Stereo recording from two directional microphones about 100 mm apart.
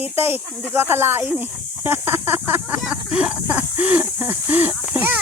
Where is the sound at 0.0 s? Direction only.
20° right (ahead or behind).